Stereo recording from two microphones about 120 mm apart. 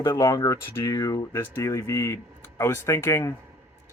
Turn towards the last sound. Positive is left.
turn(degrees=20)  # may be behind; listen again after turning